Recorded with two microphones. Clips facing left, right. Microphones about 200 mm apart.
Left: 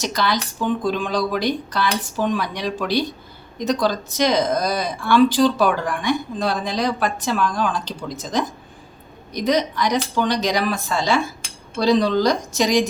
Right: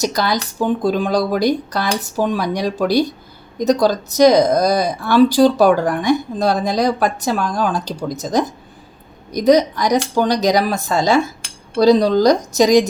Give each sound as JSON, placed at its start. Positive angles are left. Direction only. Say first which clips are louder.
{"t": 0.0, "sound": "speech", "louder": "right 3 dB", "side_deg": -40}